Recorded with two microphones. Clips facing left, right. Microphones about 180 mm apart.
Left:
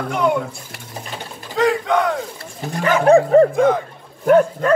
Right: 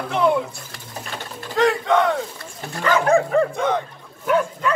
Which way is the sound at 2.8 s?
30° left (ahead or behind).